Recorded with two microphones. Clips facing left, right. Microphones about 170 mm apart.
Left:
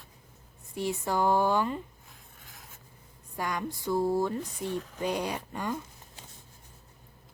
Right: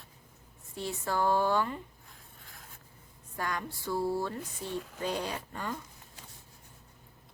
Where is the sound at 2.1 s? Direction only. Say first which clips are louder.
Left 1 dB; centre (ahead or behind).